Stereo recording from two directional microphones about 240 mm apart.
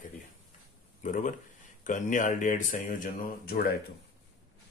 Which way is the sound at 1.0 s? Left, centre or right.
Left.